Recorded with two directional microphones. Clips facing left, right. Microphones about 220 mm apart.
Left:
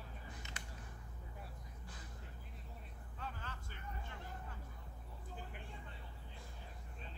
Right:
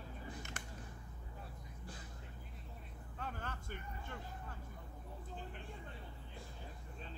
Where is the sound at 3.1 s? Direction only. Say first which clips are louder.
Right 4 dB; 50° right (ahead or behind).